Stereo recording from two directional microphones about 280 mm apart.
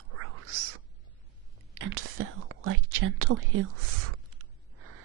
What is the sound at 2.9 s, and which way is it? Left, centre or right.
Speech, right.